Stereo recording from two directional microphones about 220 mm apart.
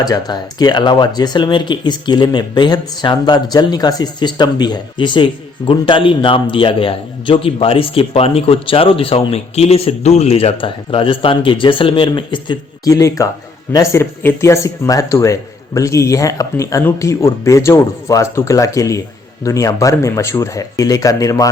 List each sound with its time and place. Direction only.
0.0 s speech: 15° left (ahead or behind)